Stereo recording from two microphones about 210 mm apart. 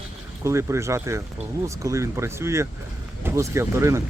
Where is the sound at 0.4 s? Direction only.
15° right (ahead or behind).